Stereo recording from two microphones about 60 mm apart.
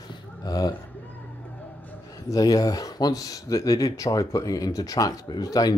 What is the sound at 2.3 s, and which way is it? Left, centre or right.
Speech, left.